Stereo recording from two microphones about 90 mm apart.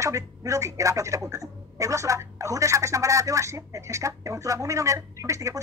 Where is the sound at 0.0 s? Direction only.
35° right (ahead or behind).